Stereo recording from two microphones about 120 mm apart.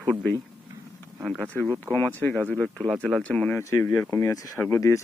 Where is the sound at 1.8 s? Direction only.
15° left (ahead or behind).